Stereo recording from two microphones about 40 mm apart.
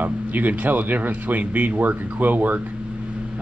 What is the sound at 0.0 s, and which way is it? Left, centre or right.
A man's voice, right.